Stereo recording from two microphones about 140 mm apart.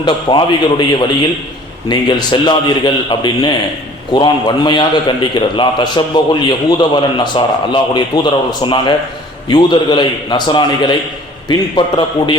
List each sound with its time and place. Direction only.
0.0 s a man's voice: 30° left (ahead or behind)
11.9 s a man's voice: 35° left (ahead or behind)